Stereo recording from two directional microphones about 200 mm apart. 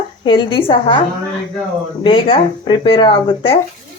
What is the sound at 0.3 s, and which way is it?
Speech, 25° left (ahead or behind).